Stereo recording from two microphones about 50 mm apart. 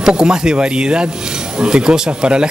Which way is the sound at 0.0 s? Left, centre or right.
Centre.